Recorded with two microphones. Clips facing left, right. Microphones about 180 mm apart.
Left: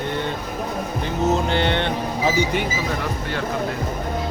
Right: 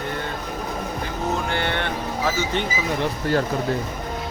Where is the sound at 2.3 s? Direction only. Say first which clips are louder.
Left 4 dB; 15° left (ahead or behind).